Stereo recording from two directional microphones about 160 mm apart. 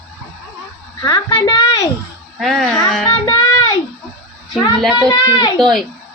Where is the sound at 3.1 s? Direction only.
20° left (ahead or behind).